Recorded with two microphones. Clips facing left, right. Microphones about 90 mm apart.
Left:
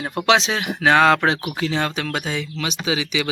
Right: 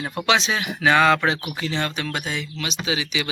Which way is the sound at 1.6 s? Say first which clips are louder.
Left 3 dB; 90° left.